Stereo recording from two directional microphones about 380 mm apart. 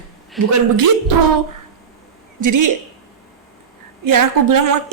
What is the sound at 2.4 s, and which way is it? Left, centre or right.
Speech, right.